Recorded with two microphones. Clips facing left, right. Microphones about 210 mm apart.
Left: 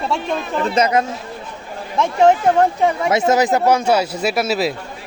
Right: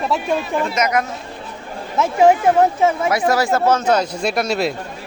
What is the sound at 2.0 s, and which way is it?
Speech, 5° right (ahead or behind).